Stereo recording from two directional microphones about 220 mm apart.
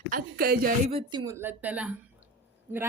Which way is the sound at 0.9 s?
20° right (ahead or behind).